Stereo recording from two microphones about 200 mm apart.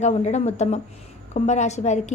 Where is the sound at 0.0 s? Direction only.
35° left (ahead or behind).